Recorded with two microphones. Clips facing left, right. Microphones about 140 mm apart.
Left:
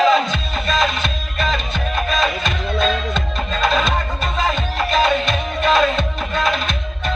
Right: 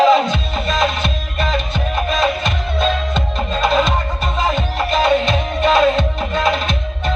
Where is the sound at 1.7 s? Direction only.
10° right (ahead or behind).